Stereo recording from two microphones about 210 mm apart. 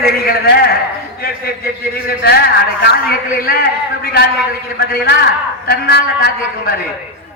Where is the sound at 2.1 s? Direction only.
50° left (ahead or behind).